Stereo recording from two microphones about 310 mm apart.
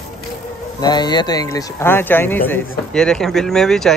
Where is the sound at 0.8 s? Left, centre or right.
Centre.